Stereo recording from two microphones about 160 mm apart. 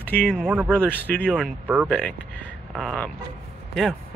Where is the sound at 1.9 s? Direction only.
5° left (ahead or behind).